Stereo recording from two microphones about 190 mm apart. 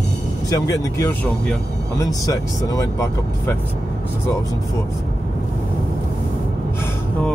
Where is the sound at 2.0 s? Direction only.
20° left (ahead or behind).